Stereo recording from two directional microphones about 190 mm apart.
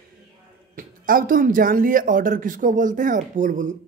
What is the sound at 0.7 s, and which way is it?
A woman's voice, 45° right (ahead or behind).